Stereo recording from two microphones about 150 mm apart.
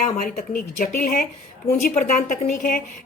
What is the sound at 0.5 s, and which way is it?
A woman's voice, 75° left (ahead or behind).